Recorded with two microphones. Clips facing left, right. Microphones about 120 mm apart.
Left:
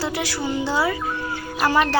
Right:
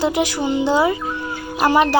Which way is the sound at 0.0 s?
20° right (ahead or behind).